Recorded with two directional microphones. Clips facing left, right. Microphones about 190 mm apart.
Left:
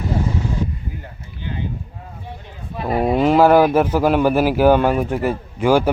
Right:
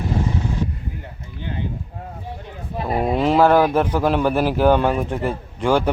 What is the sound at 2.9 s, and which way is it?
A man's voice, centre (ahead or behind).